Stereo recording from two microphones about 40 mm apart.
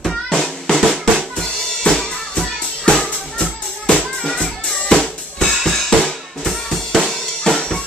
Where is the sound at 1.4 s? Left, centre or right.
Centre.